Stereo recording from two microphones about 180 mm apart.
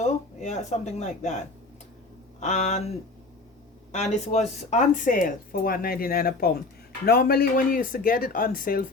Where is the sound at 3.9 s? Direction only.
40° left (ahead or behind).